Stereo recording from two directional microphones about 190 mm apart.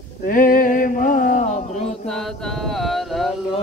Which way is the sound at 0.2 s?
45° left (ahead or behind).